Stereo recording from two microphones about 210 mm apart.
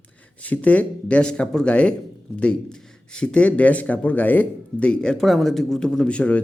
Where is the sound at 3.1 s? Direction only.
5° left (ahead or behind).